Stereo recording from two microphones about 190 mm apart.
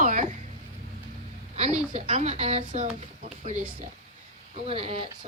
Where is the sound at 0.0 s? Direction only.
40° right (ahead or behind).